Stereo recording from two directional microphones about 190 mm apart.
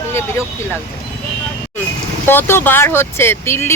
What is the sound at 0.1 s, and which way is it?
Speech, 15° left (ahead or behind).